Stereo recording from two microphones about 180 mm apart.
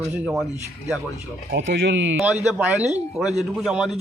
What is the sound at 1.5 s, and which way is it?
Speech, 80° right.